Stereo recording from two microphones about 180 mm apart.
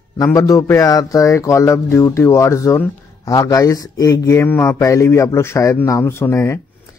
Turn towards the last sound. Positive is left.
turn(degrees=15)  # may be behind; listen again after turning